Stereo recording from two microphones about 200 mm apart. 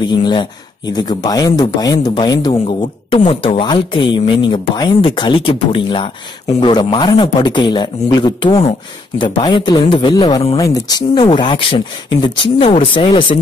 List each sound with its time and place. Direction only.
0.0 s speech: 20° left (ahead or behind)